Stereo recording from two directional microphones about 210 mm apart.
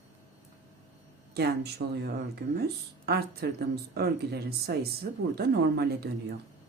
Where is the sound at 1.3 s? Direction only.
50° right (ahead or behind).